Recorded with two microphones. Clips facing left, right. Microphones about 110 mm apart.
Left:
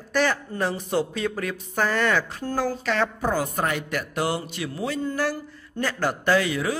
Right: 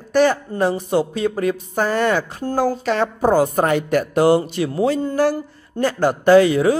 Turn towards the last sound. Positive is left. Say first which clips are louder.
# right 10 dB
turn(degrees=-30)  # may be behind; listen again after turning